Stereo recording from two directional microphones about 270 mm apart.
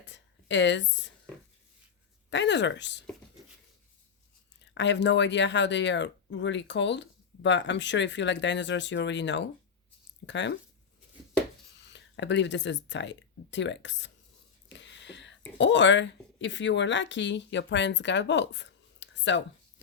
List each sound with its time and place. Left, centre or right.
0.0 s a sound: left
2.3 s speech: left
4.6 s speech: left
11.8 s speech: left